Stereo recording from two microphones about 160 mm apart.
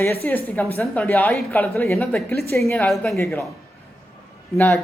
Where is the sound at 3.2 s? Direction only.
15° left (ahead or behind).